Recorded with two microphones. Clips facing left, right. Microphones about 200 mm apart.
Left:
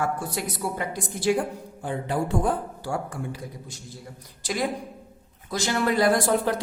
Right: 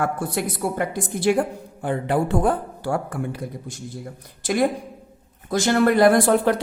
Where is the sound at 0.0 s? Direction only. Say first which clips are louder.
Right 4 dB; 55° right (ahead or behind).